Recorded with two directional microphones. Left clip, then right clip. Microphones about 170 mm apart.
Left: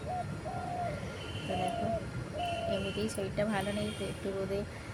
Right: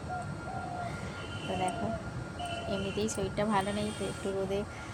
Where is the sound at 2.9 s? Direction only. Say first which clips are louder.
Right 1 dB; 15° left (ahead or behind).